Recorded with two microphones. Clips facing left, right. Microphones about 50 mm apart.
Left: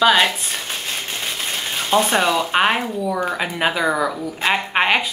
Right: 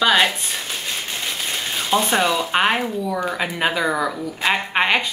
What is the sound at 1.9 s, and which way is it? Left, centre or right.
Speech, centre.